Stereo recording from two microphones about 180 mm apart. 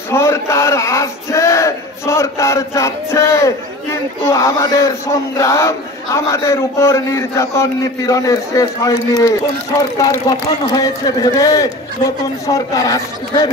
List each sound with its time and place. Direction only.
0.1 s a man's voice: 15° left (ahead or behind)